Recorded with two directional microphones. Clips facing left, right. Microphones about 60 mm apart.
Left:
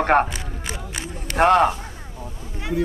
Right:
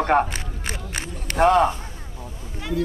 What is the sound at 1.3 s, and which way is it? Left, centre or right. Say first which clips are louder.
Speech: left 1 dB; left.